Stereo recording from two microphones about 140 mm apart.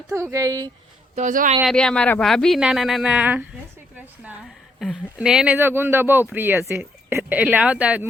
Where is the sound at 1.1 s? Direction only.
65° right (ahead or behind).